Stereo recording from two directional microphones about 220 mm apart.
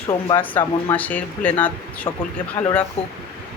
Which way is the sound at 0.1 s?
15° left (ahead or behind).